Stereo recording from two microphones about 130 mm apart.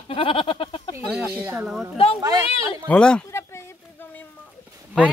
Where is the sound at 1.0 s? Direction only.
10° right (ahead or behind).